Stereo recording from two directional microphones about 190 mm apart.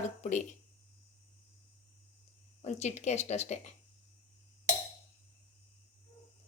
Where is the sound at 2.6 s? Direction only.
35° left (ahead or behind).